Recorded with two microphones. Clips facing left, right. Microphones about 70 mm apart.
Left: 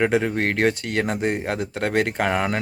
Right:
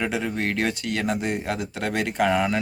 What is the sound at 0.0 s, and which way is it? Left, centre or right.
Speech, left.